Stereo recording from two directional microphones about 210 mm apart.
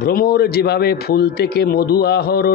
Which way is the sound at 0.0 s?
45° left (ahead or behind).